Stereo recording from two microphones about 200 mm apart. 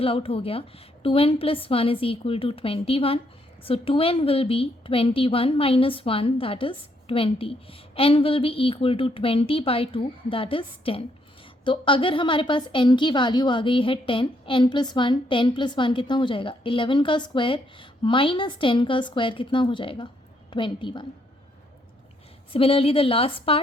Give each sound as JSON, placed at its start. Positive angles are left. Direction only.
{"t": 0.0, "sound": "a woman's voice", "side_deg": 30}
{"t": 22.5, "sound": "a woman's voice", "side_deg": 30}